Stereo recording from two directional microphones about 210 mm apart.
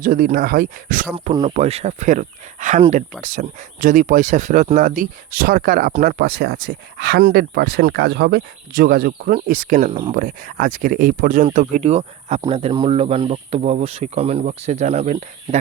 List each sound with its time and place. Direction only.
0.0 s speech: 40° right (ahead or behind)